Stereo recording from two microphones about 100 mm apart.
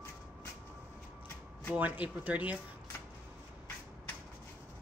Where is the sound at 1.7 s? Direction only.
15° right (ahead or behind).